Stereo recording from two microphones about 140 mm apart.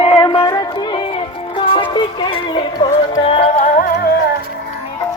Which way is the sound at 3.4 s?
50° left (ahead or behind).